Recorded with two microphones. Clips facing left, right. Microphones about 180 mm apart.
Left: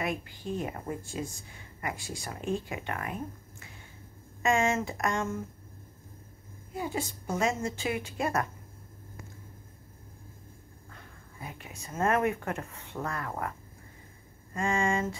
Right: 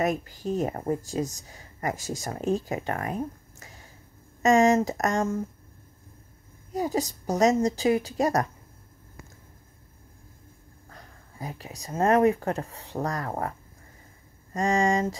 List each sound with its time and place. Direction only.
0.0 s speech: 40° right (ahead or behind)
6.7 s speech: 40° right (ahead or behind)
10.9 s speech: 40° right (ahead or behind)